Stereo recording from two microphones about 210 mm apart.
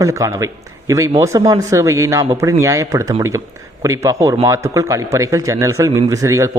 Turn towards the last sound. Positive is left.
turn(degrees=-15)  # may be behind; listen again after turning